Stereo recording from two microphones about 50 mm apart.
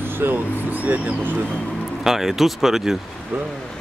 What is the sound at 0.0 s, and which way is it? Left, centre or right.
Speech, right.